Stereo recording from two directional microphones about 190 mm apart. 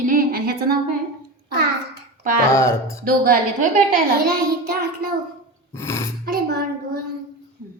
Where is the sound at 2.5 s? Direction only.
15° left (ahead or behind).